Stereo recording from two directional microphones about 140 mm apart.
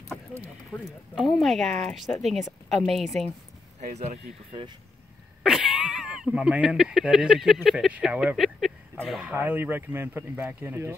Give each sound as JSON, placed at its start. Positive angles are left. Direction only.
{"t": 0.7, "sound": "speech", "side_deg": 0}
{"t": 3.9, "sound": "speech", "side_deg": -55}
{"t": 5.4, "sound": "speech", "side_deg": -5}
{"t": 9.1, "sound": "speech", "side_deg": -10}